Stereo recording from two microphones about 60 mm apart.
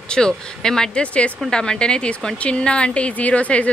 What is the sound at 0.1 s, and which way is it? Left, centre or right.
A woman's voice, centre.